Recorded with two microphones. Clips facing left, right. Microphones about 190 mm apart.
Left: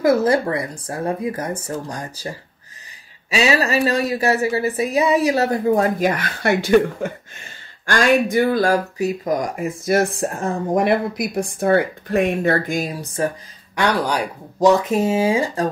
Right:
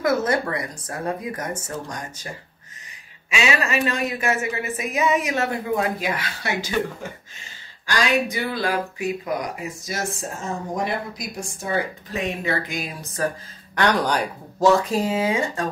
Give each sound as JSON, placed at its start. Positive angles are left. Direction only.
{"t": 0.0, "sound": "speech", "side_deg": 30}
{"t": 13.0, "sound": "speech", "side_deg": 30}
{"t": 13.7, "sound": "speech", "side_deg": 10}